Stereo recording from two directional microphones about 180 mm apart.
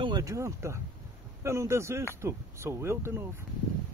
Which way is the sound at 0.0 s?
20° right (ahead or behind).